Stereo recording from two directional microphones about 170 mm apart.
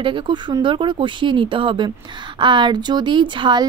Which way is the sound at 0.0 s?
30° right (ahead or behind).